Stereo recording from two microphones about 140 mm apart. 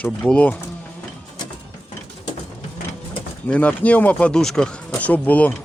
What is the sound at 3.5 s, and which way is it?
Speech, 10° left (ahead or behind).